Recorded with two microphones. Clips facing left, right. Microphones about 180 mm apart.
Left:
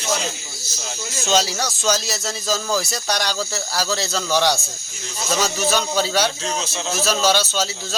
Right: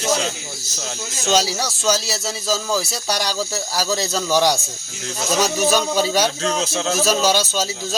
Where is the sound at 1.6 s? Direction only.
5° right (ahead or behind).